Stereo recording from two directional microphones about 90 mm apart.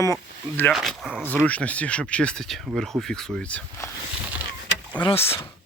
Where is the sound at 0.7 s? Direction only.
Centre (ahead or behind).